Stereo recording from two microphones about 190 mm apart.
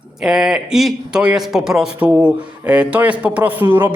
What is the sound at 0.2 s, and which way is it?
A man's voice, 5° right (ahead or behind).